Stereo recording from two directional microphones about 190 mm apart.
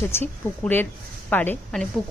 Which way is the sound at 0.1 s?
10° left (ahead or behind).